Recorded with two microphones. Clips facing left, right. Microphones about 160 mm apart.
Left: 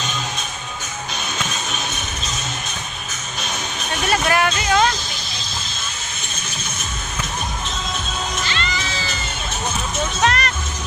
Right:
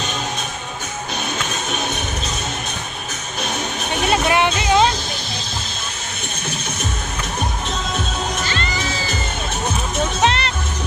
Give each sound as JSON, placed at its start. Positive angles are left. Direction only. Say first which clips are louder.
{"t": 4.1, "sound": "music", "louder": "right 1 dB", "side_deg": -20}
{"t": 8.4, "sound": "music", "louder": "right 2 dB", "side_deg": -45}
{"t": 10.2, "sound": "music", "louder": "even", "side_deg": -25}